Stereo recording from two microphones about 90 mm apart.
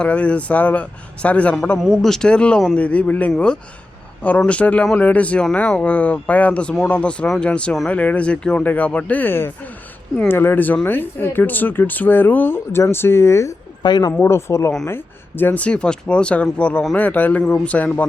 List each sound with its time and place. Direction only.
0.0 s speech: 15° left (ahead or behind); by 13.5 s 30° left (ahead or behind)
13.8 s speech: 50° left (ahead or behind)
14.1 s speech: 25° left (ahead or behind)